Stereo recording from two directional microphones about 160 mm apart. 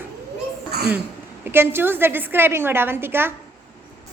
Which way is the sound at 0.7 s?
80° right.